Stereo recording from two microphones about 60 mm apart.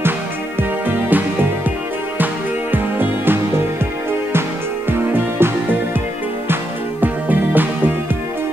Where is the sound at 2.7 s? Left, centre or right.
Right.